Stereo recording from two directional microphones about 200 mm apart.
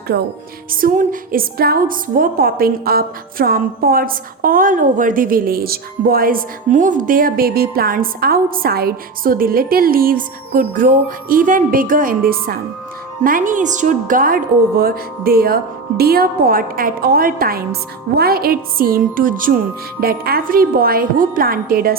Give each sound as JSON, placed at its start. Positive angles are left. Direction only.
{"t": 0.1, "sound": "music", "side_deg": -55}
{"t": 0.7, "sound": "a woman's voice", "side_deg": -45}